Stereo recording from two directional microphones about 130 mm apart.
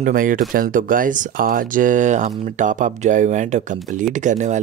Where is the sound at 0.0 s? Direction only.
90° right.